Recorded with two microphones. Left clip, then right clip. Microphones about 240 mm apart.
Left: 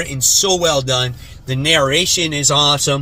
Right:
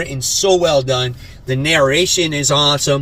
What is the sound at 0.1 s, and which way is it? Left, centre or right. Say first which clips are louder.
Speech: right 1 dB; left.